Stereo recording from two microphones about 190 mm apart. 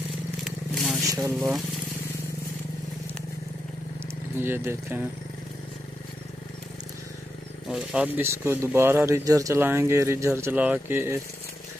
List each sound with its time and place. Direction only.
0.4 s vehicle: centre (ahead or behind)
1.0 s speech: 15° right (ahead or behind)
4.4 s speech: 10° right (ahead or behind)
7.6 s speech: 5° right (ahead or behind)